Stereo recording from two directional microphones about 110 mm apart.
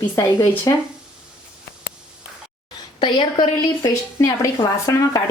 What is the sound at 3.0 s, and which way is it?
Speech, 45° left (ahead or behind).